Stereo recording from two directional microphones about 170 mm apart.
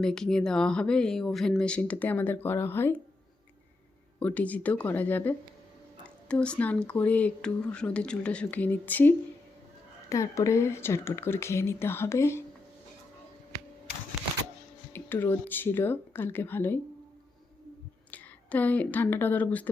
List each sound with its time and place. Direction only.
0.0 s speech: 5° left (ahead or behind)
4.2 s speech: 10° left (ahead or behind)
14.2 s a sound: centre (ahead or behind)
14.9 s speech: 10° left (ahead or behind)
18.1 s a woman's voice: 10° left (ahead or behind)